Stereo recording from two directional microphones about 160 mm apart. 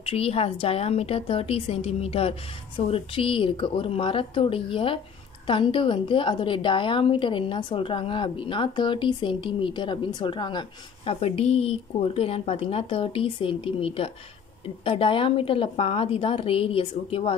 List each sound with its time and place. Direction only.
0.0 s a woman's voice: 40° left (ahead or behind)